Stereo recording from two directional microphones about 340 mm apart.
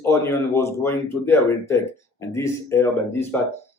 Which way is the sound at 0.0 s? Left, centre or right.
Centre.